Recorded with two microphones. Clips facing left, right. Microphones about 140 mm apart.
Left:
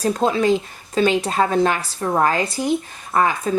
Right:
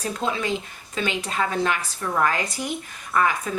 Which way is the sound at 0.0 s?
40° left (ahead or behind).